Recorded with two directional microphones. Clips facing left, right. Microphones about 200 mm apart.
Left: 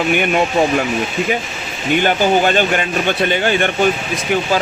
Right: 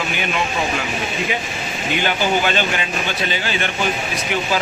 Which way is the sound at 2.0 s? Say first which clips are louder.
Left 5 dB; 45° left (ahead or behind).